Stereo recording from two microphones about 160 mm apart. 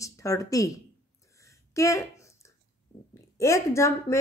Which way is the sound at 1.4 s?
20° left (ahead or behind).